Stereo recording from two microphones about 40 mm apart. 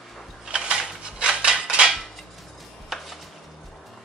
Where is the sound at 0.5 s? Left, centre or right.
Right.